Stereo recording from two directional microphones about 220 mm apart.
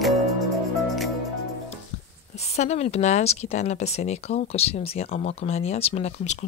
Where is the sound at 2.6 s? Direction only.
30° left (ahead or behind).